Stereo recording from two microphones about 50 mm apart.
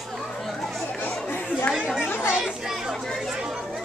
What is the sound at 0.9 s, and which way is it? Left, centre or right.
Chatter, left.